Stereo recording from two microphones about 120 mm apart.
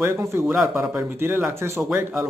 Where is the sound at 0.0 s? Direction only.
20° right (ahead or behind).